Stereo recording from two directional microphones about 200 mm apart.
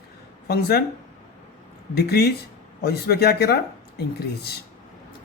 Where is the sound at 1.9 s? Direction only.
50° left (ahead or behind).